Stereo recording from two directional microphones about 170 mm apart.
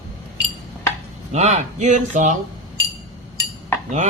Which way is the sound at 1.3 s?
40° right (ahead or behind).